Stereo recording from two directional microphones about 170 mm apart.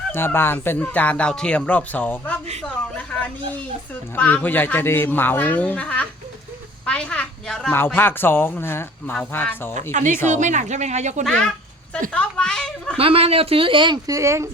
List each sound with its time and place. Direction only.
0.1 s a child's voice: 15° left (ahead or behind)
9.9 s speech: 45° right (ahead or behind)
11.2 s a woman's voice: 5° left (ahead or behind)
13.0 s a woman's voice: 35° right (ahead or behind); by 14.4 s 15° right (ahead or behind)